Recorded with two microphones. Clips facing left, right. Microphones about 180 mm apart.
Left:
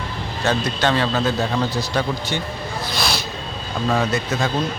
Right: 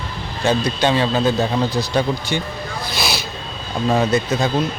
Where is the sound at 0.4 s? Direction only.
15° right (ahead or behind).